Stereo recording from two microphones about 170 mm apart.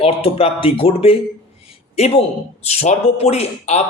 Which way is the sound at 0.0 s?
35° left (ahead or behind).